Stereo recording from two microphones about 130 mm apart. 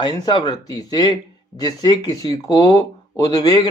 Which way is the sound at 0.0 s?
30° left (ahead or behind).